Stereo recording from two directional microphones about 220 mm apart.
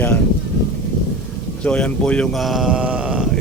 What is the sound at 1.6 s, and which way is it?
Speech, 5° left (ahead or behind).